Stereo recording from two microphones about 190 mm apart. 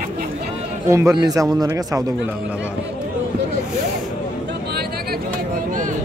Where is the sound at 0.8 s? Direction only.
15° right (ahead or behind).